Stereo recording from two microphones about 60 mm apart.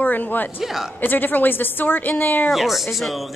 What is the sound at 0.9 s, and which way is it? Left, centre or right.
A woman's voice, left.